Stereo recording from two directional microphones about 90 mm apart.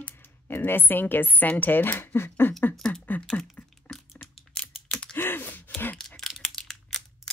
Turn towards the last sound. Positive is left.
turn(degrees=5)  # may be behind; listen again after turning